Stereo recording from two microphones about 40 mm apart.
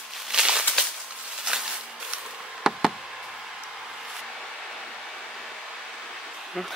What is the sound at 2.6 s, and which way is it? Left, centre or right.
Knock, centre.